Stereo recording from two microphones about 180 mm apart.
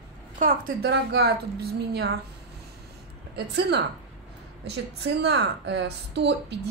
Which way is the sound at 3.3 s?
70° right (ahead or behind).